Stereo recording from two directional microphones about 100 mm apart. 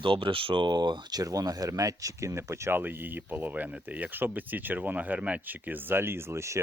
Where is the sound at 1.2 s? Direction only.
35° right (ahead or behind).